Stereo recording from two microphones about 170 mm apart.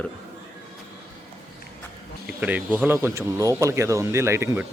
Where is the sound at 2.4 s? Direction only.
10° right (ahead or behind).